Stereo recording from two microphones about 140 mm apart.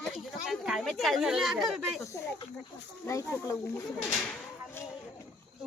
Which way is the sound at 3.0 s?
20° left (ahead or behind).